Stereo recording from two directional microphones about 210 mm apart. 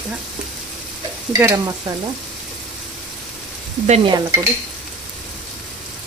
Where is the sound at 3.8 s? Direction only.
30° right (ahead or behind).